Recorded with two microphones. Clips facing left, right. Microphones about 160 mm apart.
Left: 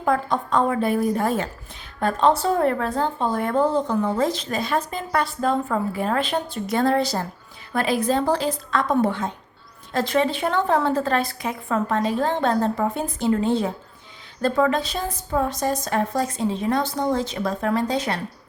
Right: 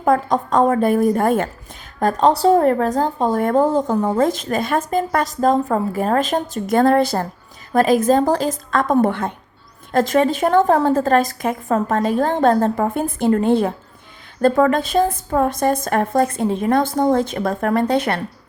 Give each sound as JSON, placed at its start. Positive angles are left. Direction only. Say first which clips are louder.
{"t": 0.0, "sound": "speech", "louder": "right 5 dB", "side_deg": -45}
{"t": 2.0, "sound": "speech", "louder": "right 4 dB", "side_deg": -40}
{"t": 9.9, "sound": "speech", "louder": "right 5 dB", "side_deg": -45}